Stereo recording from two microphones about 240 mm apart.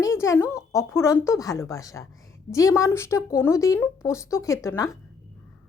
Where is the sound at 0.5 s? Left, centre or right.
Centre.